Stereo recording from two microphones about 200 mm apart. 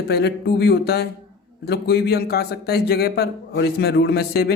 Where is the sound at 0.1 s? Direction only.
55° left (ahead or behind).